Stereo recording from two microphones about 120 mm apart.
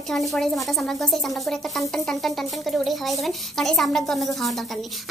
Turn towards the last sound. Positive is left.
turn(degrees=0)  # may be behind; listen again after turning